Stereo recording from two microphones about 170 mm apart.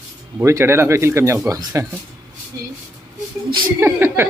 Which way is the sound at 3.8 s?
15° right (ahead or behind).